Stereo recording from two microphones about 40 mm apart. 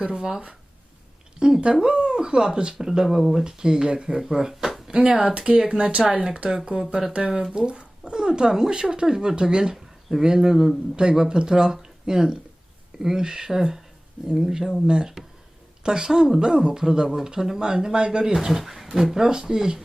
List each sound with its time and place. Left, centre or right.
0.1 s speech: centre
3.4 s speech: centre
4.9 s speech: right
5.8 s speech: right
6.7 s speech: centre
18.3 s speech: centre